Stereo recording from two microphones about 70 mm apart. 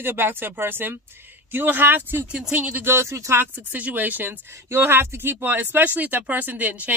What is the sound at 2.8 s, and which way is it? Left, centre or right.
Speech, right.